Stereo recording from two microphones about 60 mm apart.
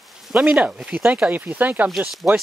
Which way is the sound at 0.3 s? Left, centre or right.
Centre.